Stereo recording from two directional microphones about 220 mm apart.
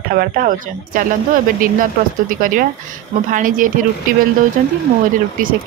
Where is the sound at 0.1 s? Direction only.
40° right (ahead or behind).